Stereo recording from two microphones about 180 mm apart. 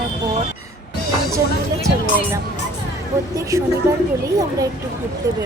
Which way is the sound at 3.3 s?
15° right (ahead or behind).